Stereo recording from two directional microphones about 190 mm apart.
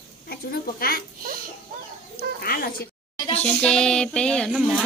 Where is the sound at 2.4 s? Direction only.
50° left (ahead or behind).